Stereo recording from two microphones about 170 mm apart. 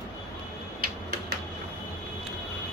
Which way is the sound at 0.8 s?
70° right (ahead or behind).